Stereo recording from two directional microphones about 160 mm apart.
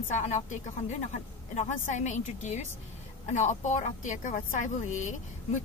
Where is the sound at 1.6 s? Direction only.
50° left (ahead or behind).